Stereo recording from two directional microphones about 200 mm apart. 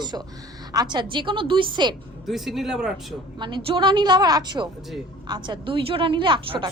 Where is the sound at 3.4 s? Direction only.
25° right (ahead or behind).